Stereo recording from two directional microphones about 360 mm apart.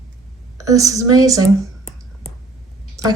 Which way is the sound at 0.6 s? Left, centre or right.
Centre.